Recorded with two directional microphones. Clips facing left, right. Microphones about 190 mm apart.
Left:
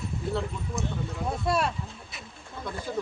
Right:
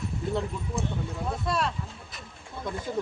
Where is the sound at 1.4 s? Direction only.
10° left (ahead or behind).